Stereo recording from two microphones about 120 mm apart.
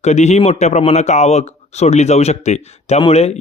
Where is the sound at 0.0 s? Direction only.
70° left (ahead or behind).